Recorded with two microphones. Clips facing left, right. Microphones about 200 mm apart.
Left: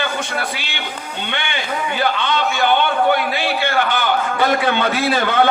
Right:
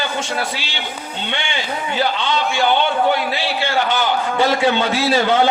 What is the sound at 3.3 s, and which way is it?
A man's voice, 55° left (ahead or behind).